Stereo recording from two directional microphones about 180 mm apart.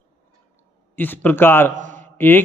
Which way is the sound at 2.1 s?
10° left (ahead or behind).